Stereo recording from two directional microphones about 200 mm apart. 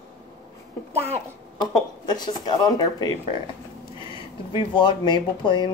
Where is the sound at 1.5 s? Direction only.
20° left (ahead or behind).